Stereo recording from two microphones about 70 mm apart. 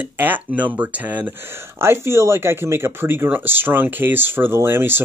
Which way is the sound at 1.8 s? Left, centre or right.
Right.